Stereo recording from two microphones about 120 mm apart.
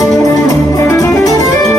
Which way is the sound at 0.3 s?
30° left (ahead or behind).